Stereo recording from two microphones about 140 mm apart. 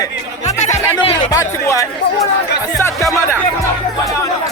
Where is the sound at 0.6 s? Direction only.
55° left (ahead or behind).